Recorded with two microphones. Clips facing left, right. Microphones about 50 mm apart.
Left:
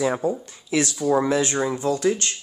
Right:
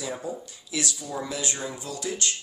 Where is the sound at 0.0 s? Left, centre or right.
Left.